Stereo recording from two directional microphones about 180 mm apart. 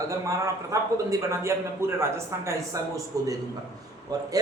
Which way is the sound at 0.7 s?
15° right (ahead or behind).